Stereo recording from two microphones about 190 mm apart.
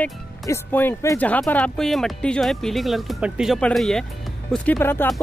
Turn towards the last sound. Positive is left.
turn(degrees=10)  # may be behind; listen again after turning